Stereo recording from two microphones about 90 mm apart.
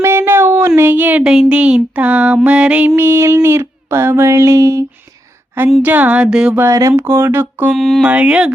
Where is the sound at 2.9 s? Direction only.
30° right (ahead or behind).